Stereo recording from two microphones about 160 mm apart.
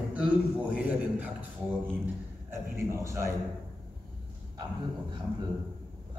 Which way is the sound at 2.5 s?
15° right (ahead or behind).